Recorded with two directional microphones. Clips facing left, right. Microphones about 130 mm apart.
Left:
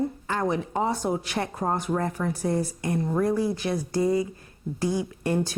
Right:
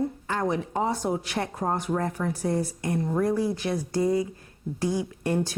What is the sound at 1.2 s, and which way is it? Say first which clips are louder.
Speech: left 1 dB; 15° left (ahead or behind).